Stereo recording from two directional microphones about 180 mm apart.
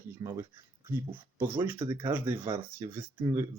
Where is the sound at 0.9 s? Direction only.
10° right (ahead or behind).